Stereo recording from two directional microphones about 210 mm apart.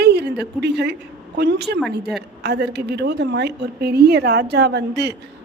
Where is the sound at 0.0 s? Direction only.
50° right (ahead or behind).